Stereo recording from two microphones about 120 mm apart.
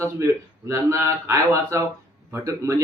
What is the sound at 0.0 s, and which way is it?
Speech, 25° right (ahead or behind).